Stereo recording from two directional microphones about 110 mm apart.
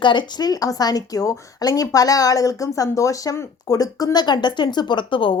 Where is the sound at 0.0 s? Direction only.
45° left (ahead or behind).